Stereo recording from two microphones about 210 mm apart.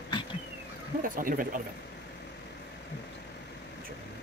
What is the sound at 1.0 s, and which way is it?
Speech, 40° right (ahead or behind).